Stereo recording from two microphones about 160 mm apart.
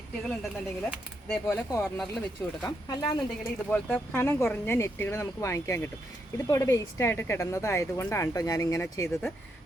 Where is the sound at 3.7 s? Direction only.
10° left (ahead or behind).